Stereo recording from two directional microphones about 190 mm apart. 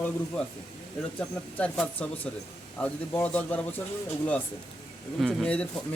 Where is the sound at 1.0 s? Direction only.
Centre (ahead or behind).